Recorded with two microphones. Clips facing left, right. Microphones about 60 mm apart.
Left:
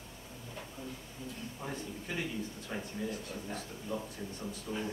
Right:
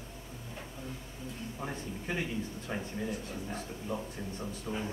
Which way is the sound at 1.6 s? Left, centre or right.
Centre.